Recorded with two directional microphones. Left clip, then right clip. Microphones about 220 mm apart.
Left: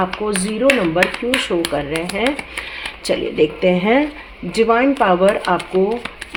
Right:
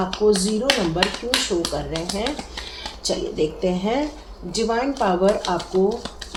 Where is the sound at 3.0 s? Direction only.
40° left (ahead or behind).